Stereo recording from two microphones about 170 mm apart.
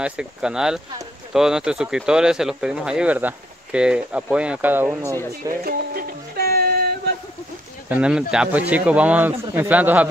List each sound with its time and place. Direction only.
0.0 s speech: 5° right (ahead or behind)
5.5 s music: 60° right (ahead or behind)
7.9 s speech: 5° right (ahead or behind)